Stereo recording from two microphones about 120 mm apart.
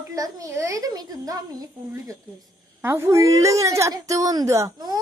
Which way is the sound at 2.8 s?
20° right (ahead or behind).